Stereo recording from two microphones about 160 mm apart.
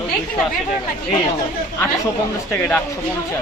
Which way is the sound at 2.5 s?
10° left (ahead or behind).